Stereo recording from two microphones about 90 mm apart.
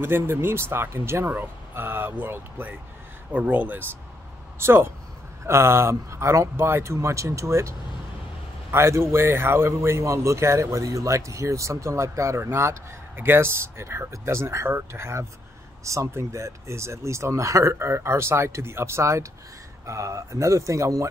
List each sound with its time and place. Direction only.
0.0 s a man's voice: 25° right (ahead or behind)
8.7 s a man's voice: 30° right (ahead or behind)